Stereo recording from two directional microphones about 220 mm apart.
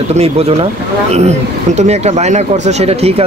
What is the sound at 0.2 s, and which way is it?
Speech, 25° right (ahead or behind).